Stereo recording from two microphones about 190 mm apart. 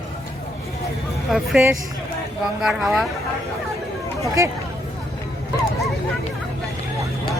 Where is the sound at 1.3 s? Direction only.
Centre (ahead or behind).